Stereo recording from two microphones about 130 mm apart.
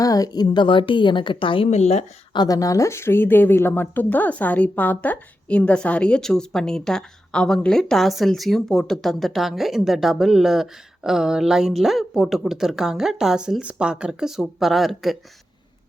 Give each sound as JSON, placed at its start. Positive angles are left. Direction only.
{"t": 0.0, "sound": "a woman's voice", "side_deg": 30}
{"t": 2.3, "sound": "speech", "side_deg": 30}